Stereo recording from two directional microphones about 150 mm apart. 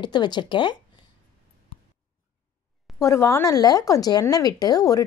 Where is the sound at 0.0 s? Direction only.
30° left (ahead or behind).